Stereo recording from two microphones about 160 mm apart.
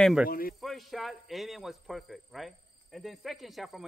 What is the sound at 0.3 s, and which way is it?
Speech, 65° left (ahead or behind).